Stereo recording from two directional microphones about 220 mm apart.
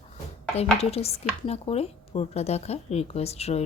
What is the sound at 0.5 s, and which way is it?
Speech, 30° left (ahead or behind).